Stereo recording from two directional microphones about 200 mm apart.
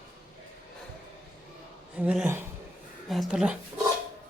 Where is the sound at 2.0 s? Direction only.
5° right (ahead or behind).